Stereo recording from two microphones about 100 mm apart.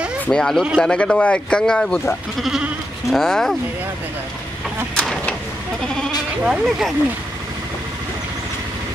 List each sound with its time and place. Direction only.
0.3 s a man's voice: 5° left (ahead or behind)
2.4 s speech: 5° right (ahead or behind)
4.9 s a sound: 10° left (ahead or behind)
6.4 s speech: 5° right (ahead or behind)